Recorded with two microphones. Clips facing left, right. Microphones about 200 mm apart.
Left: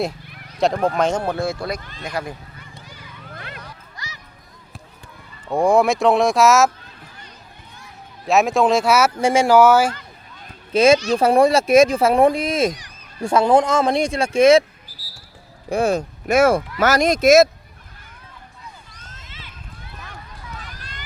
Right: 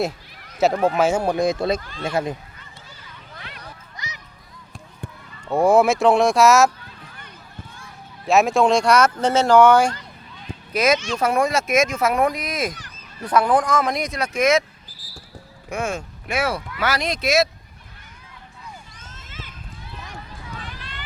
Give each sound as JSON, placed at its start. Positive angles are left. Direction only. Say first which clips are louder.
{"t": 0.6, "sound": "speech", "louder": "right 1 dB", "side_deg": -5}
{"t": 3.9, "sound": "a sound", "louder": "right 3 dB", "side_deg": -20}
{"t": 5.5, "sound": "speech", "louder": "even", "side_deg": -5}
{"t": 8.3, "sound": "speech", "louder": "even", "side_deg": 0}
{"t": 10.7, "sound": "speech", "louder": "left 6 dB", "side_deg": 30}
{"t": 15.7, "sound": "speech", "louder": "left 7 dB", "side_deg": 35}
{"t": 18.9, "sound": "a sound", "louder": "right 3 dB", "side_deg": -45}
{"t": 20.6, "sound": "run", "louder": "right 2 dB", "side_deg": 45}